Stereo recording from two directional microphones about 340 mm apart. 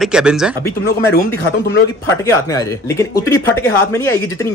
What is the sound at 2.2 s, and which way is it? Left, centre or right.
Speech, centre.